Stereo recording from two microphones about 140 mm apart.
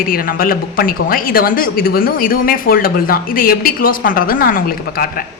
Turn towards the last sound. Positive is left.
turn(degrees=90)